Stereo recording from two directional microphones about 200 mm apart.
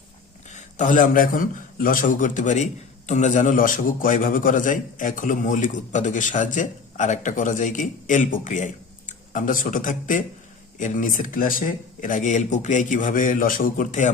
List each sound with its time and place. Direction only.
0.5 s a man's voice: 40° left (ahead or behind)